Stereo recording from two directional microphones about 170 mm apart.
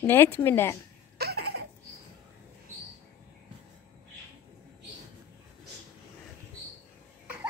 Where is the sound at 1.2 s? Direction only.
70° right (ahead or behind).